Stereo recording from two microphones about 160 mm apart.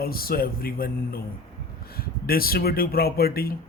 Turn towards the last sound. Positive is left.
turn(degrees=70)  # may be behind; listen again after turning